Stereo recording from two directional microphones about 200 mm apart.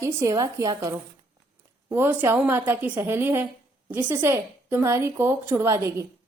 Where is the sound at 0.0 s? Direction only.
15° right (ahead or behind).